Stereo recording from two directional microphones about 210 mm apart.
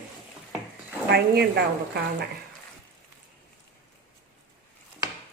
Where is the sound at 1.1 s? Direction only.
50° right (ahead or behind).